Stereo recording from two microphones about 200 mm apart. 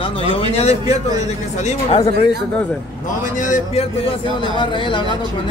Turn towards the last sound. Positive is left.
turn(degrees=25)  # may be behind; listen again after turning